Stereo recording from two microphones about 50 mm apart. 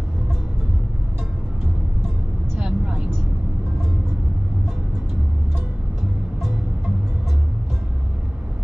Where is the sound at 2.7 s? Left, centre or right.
Centre.